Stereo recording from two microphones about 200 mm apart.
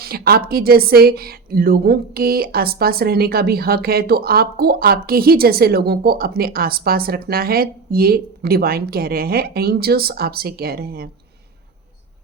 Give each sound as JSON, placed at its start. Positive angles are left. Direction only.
{"t": 0.0, "sound": "a woman's voice", "side_deg": -50}